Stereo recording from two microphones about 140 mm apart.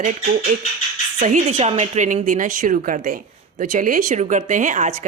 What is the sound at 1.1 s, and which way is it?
Speech, 65° right (ahead or behind).